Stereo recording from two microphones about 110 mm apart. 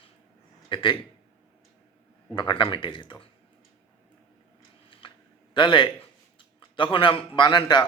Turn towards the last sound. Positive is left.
turn(degrees=45)  # may be behind; listen again after turning